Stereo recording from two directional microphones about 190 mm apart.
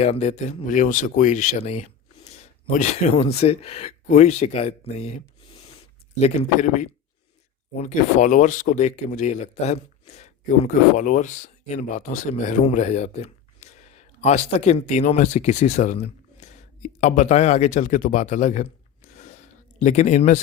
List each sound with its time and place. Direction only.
0.0 s speech: 35° left (ahead or behind)
6.1 s speech: 35° left (ahead or behind)